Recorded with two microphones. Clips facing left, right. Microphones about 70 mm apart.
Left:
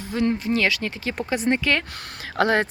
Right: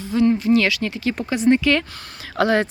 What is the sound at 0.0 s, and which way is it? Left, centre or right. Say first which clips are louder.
Speech: right 5 dB; left.